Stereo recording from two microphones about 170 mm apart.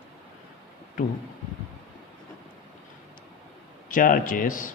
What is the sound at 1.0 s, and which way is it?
Speech, 55° left (ahead or behind).